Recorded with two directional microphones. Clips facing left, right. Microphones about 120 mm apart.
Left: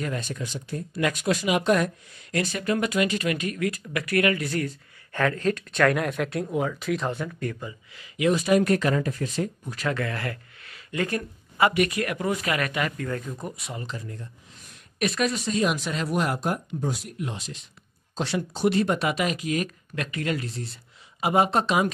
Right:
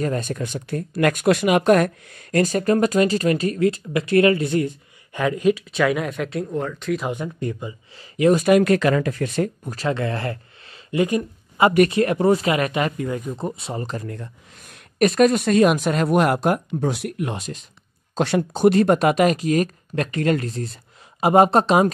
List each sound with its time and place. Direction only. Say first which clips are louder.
0.0 s speech: right 7 dB; 45° right (ahead or behind); by 7.1 s centre (ahead or behind)
7.1 s speech: right 3 dB; 20° right (ahead or behind); by 8.5 s 40° right (ahead or behind)
8.5 s speech: right 5 dB; 85° right; by 9.8 s 60° right (ahead or behind)
9.8 s speech: right 5 dB; 25° right (ahead or behind)
11.9 s speech: right 9 dB; 30° right (ahead or behind)
13.3 s speech: right 7 dB; 25° right (ahead or behind)
13.8 s speech: right 6 dB; 60° right (ahead or behind)
15.0 s speech: right 9 dB; 45° right (ahead or behind); by 17.5 s 65° right (ahead or behind)
18.1 s speech: right 7 dB; 50° right (ahead or behind)